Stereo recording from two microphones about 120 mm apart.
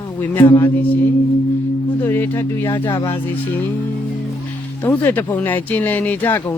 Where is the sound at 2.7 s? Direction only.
35° left (ahead or behind).